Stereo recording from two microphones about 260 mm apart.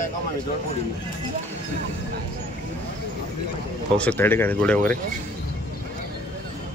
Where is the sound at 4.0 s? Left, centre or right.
Centre.